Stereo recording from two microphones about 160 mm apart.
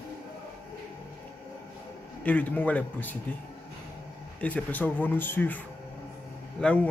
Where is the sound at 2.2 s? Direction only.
10° left (ahead or behind).